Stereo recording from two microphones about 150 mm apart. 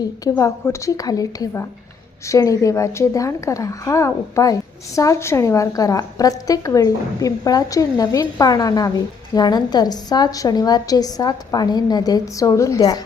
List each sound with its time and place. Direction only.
0.3 s a woman's voice: 20° left (ahead or behind)